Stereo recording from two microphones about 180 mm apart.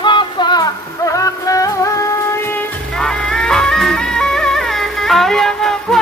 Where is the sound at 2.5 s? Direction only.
5° left (ahead or behind).